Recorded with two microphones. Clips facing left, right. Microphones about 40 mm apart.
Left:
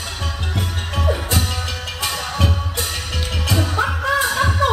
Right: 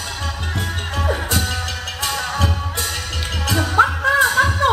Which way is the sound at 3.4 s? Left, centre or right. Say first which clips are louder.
Right 5 dB; right.